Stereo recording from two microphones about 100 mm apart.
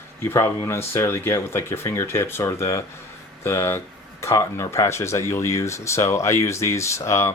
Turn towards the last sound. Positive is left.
turn(degrees=30)  # may be behind; listen again after turning